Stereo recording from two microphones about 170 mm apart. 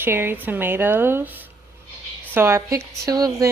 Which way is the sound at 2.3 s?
15° right (ahead or behind).